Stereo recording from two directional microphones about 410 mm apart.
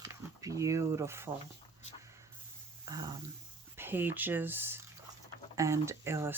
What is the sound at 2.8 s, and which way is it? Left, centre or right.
Speech, centre.